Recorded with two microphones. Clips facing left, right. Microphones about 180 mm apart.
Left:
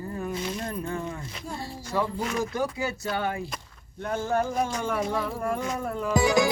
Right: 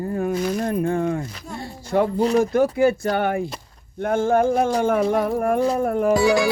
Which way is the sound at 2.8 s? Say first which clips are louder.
Right 11 dB; 55° right (ahead or behind).